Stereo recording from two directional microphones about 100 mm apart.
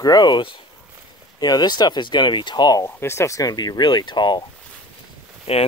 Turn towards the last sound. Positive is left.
turn(degrees=90)